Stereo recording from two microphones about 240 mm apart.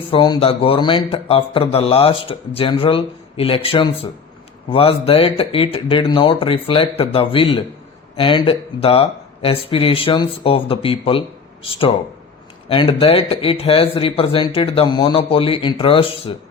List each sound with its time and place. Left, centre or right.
0.1 s speech: left